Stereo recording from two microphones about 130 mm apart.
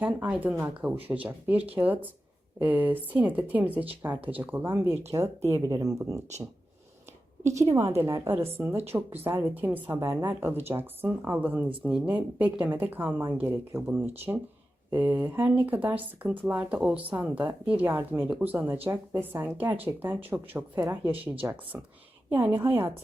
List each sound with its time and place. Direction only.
0.0 s speech: 10° right (ahead or behind)
7.4 s a woman's voice: 20° right (ahead or behind)